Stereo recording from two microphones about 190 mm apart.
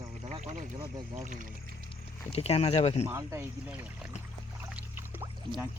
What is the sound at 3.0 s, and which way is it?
Speech, 15° right (ahead or behind).